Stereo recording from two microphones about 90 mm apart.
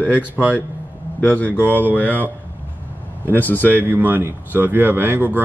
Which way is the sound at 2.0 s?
20° right (ahead or behind).